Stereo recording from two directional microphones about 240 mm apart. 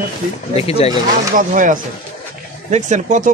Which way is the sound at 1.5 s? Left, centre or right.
Right.